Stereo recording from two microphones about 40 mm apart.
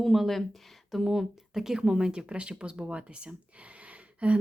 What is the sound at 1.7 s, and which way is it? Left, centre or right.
Speech, centre.